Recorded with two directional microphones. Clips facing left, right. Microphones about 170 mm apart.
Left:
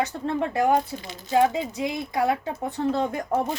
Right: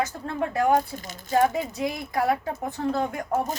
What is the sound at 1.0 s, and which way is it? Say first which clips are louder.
Speech: left 1 dB; 45° right (ahead or behind).